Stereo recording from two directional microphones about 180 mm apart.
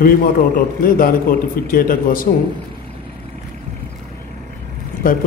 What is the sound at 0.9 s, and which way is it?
A man's voice, 50° left (ahead or behind).